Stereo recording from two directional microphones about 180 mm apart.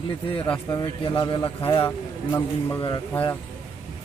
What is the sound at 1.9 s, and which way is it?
Speech, 15° left (ahead or behind).